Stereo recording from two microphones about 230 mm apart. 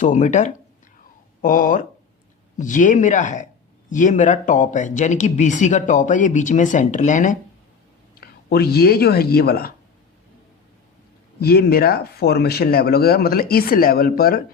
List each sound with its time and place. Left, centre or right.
0.0 s speech: left
11.3 s speech: left